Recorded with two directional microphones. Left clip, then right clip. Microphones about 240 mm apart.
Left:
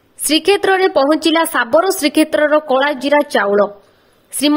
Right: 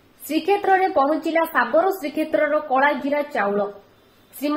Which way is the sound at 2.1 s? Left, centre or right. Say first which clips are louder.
Left 9 dB; left.